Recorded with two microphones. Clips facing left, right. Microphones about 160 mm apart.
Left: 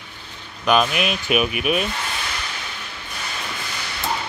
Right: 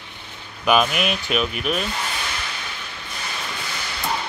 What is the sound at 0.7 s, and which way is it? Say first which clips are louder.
Speech: even; centre (ahead or behind).